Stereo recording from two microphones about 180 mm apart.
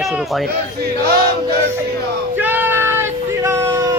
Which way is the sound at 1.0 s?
60° right (ahead or behind).